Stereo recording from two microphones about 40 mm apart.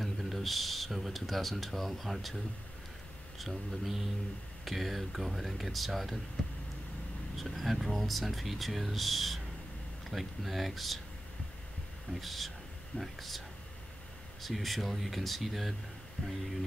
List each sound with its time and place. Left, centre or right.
0.0 s speech: centre
7.3 s speech: centre
12.1 s speech: centre
14.4 s speech: centre
16.2 s speech: left